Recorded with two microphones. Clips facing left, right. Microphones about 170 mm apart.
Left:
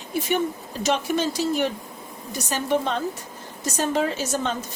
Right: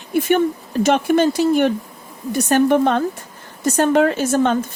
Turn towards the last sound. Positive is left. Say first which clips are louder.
# right 9 dB
turn(degrees=-60)  # may be behind; listen again after turning